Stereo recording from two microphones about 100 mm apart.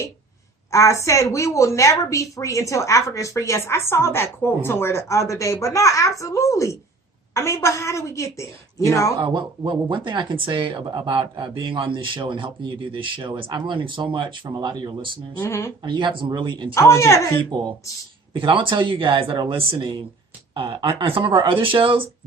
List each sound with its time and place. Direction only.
0.7 s a woman's voice: 30° left (ahead or behind)
9.1 s speech: 50° right (ahead or behind)
15.4 s a woman's voice: 25° left (ahead or behind)
15.8 s speech: 50° right (ahead or behind)
16.7 s a woman's voice: 30° left (ahead or behind)
17.5 s speech: 45° right (ahead or behind)
18.3 s speech: 60° right (ahead or behind)